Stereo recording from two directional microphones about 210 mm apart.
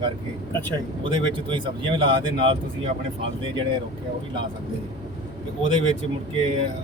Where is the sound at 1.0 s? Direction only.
20° right (ahead or behind).